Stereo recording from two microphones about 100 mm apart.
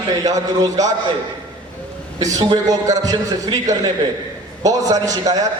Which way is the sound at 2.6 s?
35° right (ahead or behind).